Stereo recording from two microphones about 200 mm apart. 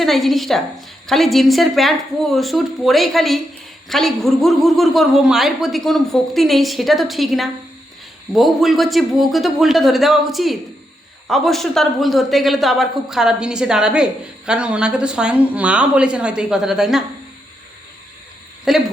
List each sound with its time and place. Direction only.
0.0 s speech: centre (ahead or behind)
18.7 s speech: centre (ahead or behind)